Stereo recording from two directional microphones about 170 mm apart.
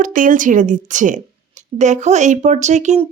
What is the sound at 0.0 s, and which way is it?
A woman's voice, 50° right (ahead or behind).